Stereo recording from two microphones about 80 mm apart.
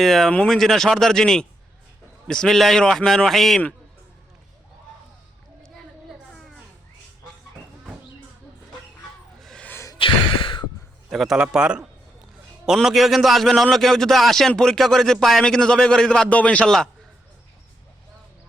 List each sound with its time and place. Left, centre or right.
0.0 s speech: centre
9.4 s gasp: centre
10.0 s sigh: left
11.1 s a man's voice: centre
11.3 s a man's voice: centre